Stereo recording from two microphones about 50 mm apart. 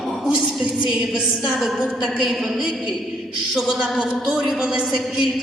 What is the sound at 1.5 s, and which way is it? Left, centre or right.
Music, centre.